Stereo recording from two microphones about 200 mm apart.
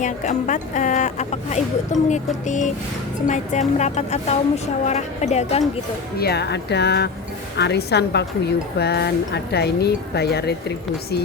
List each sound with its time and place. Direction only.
0.0 s a woman's voice: 40° left (ahead or behind)
6.1 s speech: 55° left (ahead or behind)